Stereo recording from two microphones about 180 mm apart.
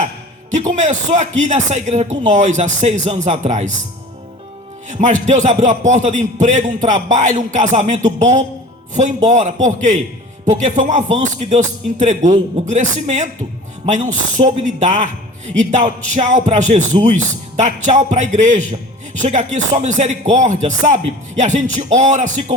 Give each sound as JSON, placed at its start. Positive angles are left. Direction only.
{"t": 0.5, "sound": "speech", "side_deg": -40}
{"t": 4.9, "sound": "a man's voice", "side_deg": -40}